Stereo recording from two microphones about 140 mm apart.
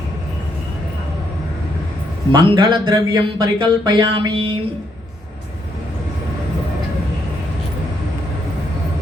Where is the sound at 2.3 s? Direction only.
35° right (ahead or behind).